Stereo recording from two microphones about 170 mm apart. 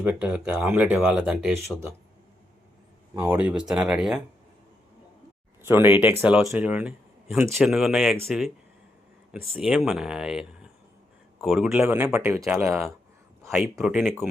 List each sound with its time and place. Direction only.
0.0 s speech: 10° right (ahead or behind)
3.2 s speech: 10° right (ahead or behind)
5.6 s speech: 10° right (ahead or behind)
9.6 s speech: 5° right (ahead or behind)
13.5 s speech: centre (ahead or behind)